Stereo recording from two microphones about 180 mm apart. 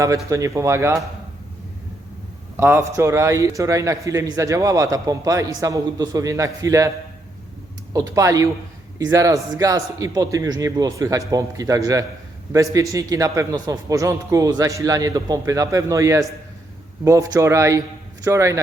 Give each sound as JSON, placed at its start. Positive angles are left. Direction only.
{"t": 0.3, "sound": "a man's voice", "side_deg": -20}
{"t": 2.6, "sound": "a man's voice", "side_deg": -15}
{"t": 7.9, "sound": "a man's voice", "side_deg": -20}